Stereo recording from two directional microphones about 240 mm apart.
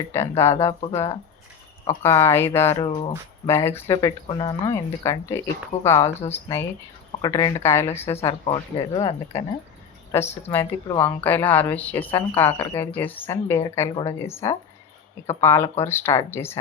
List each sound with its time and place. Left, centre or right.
0.1 s a woman's voice: centre
2.0 s a woman's voice: centre
3.4 s a woman's voice: centre
7.2 s a woman's voice: centre
8.0 s a woman's voice: left